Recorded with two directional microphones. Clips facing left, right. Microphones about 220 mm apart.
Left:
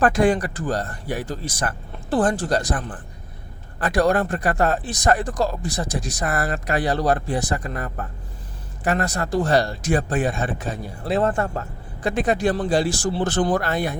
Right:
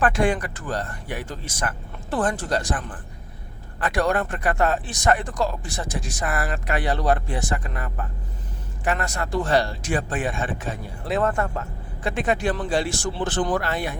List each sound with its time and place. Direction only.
0.0 s speech: 35° left (ahead or behind)